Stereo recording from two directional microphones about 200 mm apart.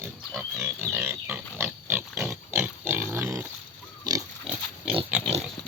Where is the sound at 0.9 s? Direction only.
10° right (ahead or behind).